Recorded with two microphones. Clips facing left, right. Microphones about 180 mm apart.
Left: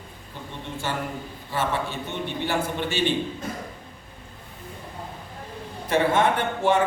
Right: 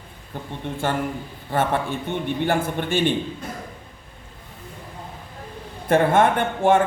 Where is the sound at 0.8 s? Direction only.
55° right (ahead or behind).